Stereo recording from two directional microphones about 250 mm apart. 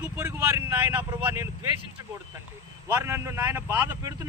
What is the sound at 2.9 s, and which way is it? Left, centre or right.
Speech, centre.